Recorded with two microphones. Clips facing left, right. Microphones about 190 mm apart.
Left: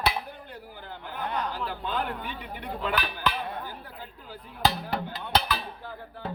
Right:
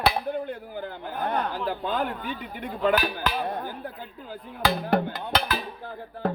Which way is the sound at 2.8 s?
45° right (ahead or behind).